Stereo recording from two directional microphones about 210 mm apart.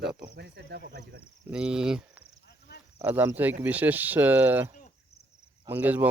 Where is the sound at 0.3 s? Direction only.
55° right (ahead or behind).